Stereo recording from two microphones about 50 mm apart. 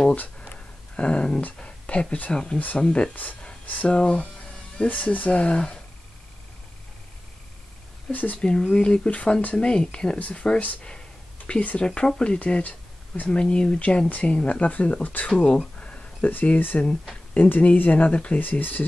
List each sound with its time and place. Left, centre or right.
0.9 s speech: left
3.2 s speech: left
3.9 s speech: centre
4.8 s speech: left
8.1 s speech: left
8.4 s speech: centre
15.8 s a sound: left
16.4 s speech: left
18.4 s speech: left